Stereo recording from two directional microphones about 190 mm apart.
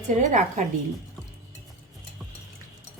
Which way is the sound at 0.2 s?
40° right (ahead or behind).